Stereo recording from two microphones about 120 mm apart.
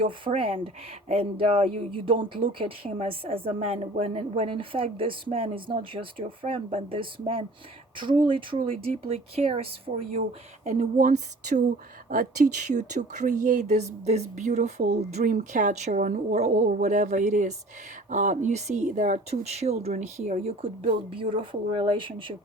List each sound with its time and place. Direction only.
0.0 s speech: 50° right (ahead or behind)
9.9 s speech: 90° right
10.7 s speech: 75° right (ahead or behind); by 11.6 s 90° right
12.6 s speech: 85° right; by 20.5 s 70° right (ahead or behind)
21.1 s speech: 45° right (ahead or behind)